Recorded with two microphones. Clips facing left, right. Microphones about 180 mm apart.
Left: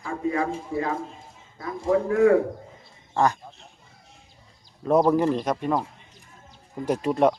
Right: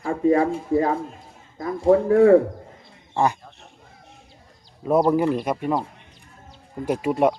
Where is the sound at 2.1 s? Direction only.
35° right (ahead or behind).